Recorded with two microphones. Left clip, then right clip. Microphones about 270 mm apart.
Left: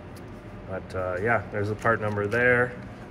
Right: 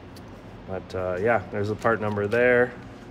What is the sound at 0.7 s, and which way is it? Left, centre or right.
Speech, right.